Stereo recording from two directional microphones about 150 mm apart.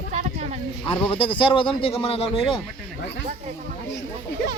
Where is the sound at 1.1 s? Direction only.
35° left (ahead or behind).